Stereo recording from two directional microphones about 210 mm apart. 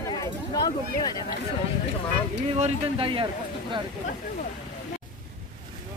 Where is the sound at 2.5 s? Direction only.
30° right (ahead or behind).